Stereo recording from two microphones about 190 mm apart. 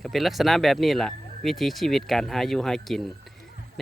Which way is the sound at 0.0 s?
Centre (ahead or behind).